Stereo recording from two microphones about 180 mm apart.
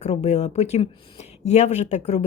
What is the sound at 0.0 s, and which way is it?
A woman's voice, 40° left (ahead or behind).